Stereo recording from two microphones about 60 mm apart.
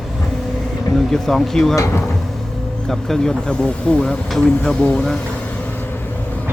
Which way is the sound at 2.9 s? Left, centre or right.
Centre.